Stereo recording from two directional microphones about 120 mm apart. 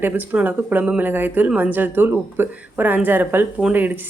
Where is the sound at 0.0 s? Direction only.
15° right (ahead or behind).